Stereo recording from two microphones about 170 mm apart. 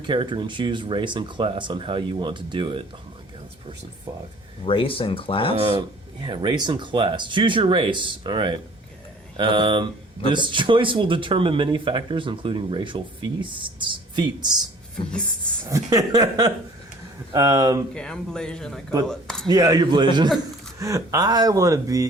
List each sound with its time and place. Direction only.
0.0 s speech: 30° right (ahead or behind)
4.6 s speech: 30° left (ahead or behind)
6.2 s speech: 25° right (ahead or behind)
15.7 s speech: 20° right (ahead or behind)
17.9 s speech: 5° left (ahead or behind)
19.5 s speech: 20° right (ahead or behind)